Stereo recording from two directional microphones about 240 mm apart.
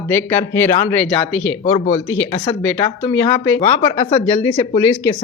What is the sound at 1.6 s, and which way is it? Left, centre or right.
Speech, left.